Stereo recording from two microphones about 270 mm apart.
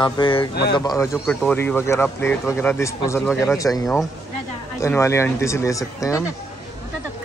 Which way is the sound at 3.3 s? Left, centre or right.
Centre.